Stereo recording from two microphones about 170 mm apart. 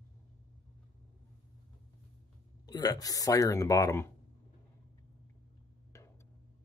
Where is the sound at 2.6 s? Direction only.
20° left (ahead or behind).